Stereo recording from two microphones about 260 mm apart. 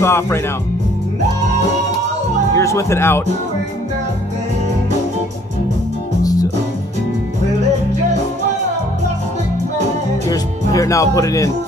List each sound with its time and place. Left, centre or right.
0.0 s speech: centre
2.5 s speech: centre
10.2 s music: centre